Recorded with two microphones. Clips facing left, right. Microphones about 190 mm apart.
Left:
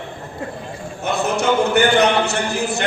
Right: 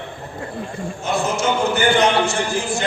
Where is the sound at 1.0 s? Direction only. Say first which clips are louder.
Left 1 dB; 60° left (ahead or behind).